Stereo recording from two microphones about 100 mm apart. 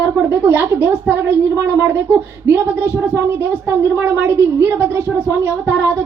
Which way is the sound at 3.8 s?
25° right (ahead or behind).